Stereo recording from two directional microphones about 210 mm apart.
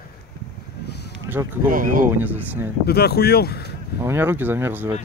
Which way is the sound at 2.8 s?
50° left (ahead or behind).